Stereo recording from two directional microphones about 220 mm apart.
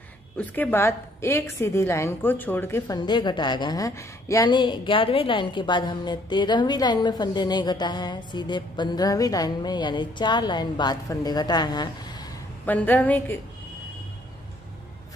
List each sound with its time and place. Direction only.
0.4 s a woman's voice: 10° left (ahead or behind)
12.6 s a woman's voice: 5° left (ahead or behind)